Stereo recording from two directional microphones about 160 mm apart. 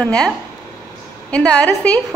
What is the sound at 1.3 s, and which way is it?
Speech, 5° left (ahead or behind).